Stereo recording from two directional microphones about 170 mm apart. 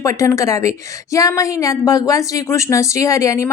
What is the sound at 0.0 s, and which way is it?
A woman's voice, 20° left (ahead or behind).